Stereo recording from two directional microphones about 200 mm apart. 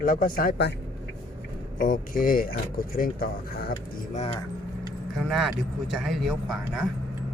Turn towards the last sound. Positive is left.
turn(degrees=0)  # may be behind; listen again after turning